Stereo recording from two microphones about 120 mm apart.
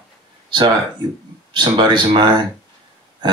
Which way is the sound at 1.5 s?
40° right (ahead or behind).